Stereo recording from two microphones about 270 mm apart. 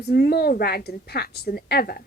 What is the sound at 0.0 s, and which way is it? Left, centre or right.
A woman's voice, left.